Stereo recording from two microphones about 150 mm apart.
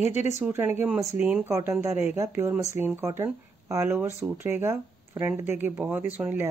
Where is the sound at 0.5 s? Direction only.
15° right (ahead or behind).